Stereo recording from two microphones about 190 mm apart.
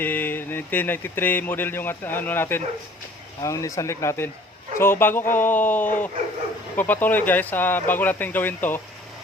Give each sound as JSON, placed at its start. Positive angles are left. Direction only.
{"t": 0.0, "sound": "speech", "side_deg": 10}